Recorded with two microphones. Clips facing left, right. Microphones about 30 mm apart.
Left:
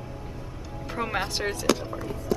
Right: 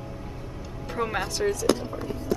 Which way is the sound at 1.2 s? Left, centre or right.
Left.